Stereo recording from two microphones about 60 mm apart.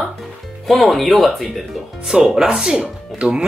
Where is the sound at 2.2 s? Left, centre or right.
Centre.